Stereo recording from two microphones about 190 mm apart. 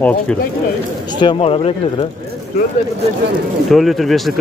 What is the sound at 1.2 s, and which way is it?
Speech, 30° left (ahead or behind).